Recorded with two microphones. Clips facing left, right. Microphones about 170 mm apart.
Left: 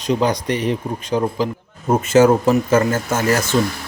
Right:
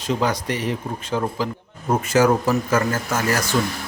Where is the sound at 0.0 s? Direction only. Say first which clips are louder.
Left 4 dB; 20° left (ahead or behind).